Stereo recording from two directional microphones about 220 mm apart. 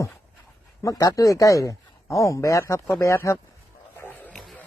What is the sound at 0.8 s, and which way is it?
Speech, 15° left (ahead or behind).